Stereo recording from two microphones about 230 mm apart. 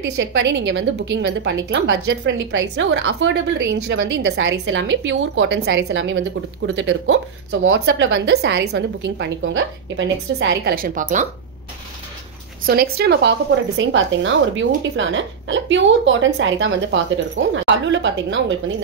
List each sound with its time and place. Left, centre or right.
0.0 s a woman's voice: right
12.6 s a woman's voice: right